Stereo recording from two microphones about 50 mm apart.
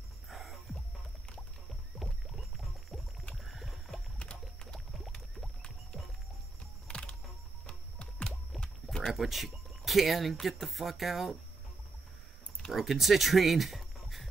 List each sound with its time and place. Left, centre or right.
0.3 s music: centre
1.7 s music: centre
3.4 s a sound: centre
4.2 s music: left
4.7 s a sound: centre
6.9 s music: centre
8.5 s a sound: centre
9.1 s speech: centre
12.7 s speech: centre